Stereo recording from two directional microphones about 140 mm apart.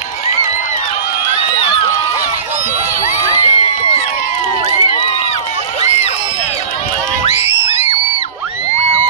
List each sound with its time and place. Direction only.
3.3 s crowd: 50° right (ahead or behind)